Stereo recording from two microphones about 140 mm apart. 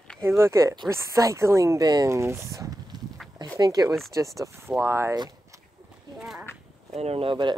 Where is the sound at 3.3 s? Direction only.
30° right (ahead or behind).